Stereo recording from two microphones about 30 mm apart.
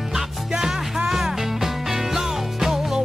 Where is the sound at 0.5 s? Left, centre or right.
Centre.